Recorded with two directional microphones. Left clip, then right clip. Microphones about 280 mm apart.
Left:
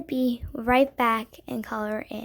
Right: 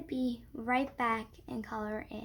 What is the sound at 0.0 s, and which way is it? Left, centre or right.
A child's voice, left.